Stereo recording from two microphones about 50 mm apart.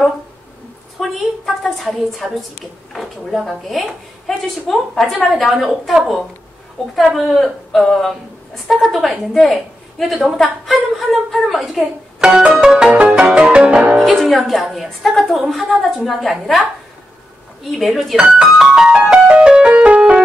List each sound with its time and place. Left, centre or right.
1.4 s a woman's voice: centre
5.9 s music: centre
7.2 s a woman's voice: centre
12.2 s music: centre
12.9 s music: right
13.2 s music: centre
13.9 s music: centre
14.2 s a woman's voice: centre
17.6 s a woman's voice: centre
18.1 s music: centre